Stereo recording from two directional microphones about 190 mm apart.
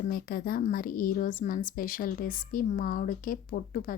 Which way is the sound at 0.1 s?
50° left (ahead or behind).